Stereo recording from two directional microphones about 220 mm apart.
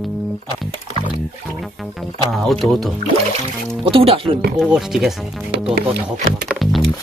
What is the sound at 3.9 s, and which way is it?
Speech, 25° right (ahead or behind).